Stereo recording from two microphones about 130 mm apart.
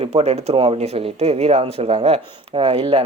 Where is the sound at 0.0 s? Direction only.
55° right (ahead or behind).